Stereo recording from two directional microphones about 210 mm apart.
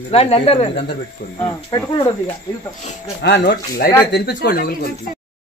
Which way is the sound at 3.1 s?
55° left (ahead or behind).